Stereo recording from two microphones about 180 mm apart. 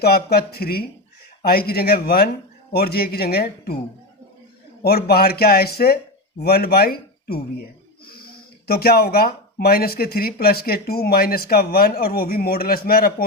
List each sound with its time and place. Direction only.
0.0 s speech: 60° left (ahead or behind)
4.8 s speech: 60° left (ahead or behind)
8.6 s speech: 55° left (ahead or behind)